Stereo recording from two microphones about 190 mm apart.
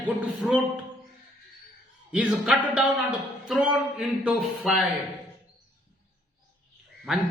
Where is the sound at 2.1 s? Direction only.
5° right (ahead or behind).